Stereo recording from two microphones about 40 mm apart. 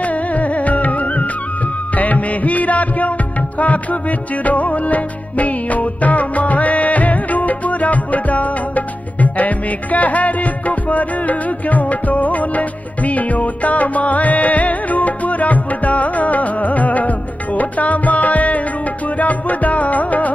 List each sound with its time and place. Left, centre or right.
0.0 s music: left